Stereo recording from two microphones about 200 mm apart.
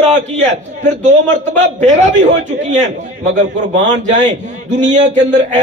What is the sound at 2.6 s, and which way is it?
A man's voice, 35° right (ahead or behind).